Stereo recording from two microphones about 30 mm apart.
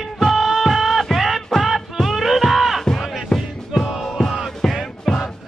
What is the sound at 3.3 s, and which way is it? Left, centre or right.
Music, centre.